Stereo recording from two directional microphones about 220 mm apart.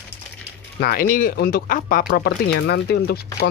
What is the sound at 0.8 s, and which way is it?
Speech, 40° left (ahead or behind).